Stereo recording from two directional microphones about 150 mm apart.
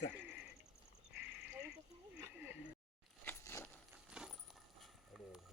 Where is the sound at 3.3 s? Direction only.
15° left (ahead or behind).